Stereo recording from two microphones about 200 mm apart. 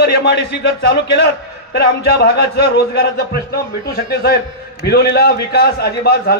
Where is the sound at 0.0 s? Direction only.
55° left (ahead or behind).